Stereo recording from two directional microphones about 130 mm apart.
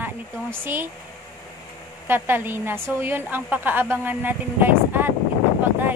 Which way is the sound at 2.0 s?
15° right (ahead or behind).